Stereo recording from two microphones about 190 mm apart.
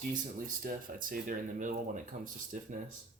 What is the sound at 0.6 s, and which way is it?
Speech, 45° right (ahead or behind).